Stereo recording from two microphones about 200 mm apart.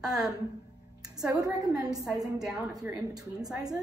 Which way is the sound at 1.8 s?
20° right (ahead or behind).